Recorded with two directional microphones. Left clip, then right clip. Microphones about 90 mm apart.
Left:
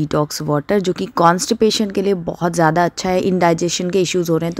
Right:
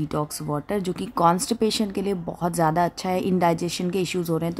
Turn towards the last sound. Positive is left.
turn(degrees=30)  # may be behind; listen again after turning